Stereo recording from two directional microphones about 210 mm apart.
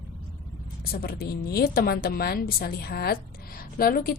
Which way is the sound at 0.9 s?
45° left (ahead or behind).